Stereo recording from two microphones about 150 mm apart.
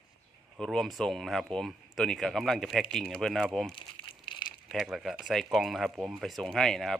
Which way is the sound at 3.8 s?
35° left (ahead or behind).